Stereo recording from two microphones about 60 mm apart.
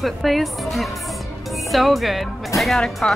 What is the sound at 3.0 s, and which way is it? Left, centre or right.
Speech, centre.